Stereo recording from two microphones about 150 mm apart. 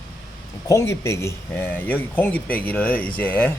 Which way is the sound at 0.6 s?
20° left (ahead or behind).